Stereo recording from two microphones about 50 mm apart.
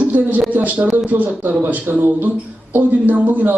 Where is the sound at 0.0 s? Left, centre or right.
Right.